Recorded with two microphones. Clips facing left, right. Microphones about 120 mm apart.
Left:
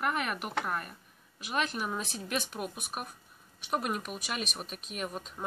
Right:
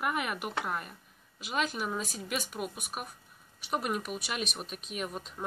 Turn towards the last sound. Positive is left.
turn(degrees=0)  # may be behind; listen again after turning